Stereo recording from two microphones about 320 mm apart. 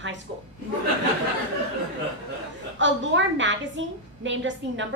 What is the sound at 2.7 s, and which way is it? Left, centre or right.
A woman's voice, right.